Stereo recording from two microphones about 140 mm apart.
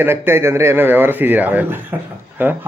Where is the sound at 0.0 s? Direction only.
15° right (ahead or behind).